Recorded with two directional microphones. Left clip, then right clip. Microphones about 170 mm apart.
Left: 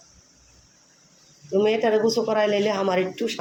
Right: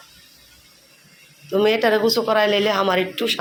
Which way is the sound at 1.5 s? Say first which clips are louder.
Right 3 dB; 10° left (ahead or behind).